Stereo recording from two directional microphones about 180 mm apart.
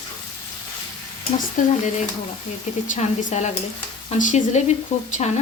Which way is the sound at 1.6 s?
45° left (ahead or behind).